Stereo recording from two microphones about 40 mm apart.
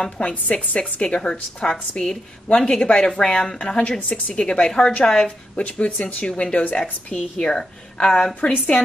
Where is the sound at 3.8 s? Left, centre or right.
Left; by 5.3 s centre.